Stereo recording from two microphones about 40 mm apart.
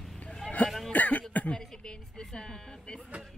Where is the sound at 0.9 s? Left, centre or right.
Left.